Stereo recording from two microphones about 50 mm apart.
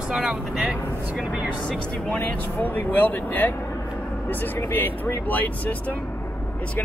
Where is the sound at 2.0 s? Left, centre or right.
Left.